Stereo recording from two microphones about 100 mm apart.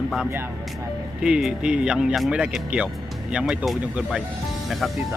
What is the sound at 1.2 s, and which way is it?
Speech, 5° right (ahead or behind).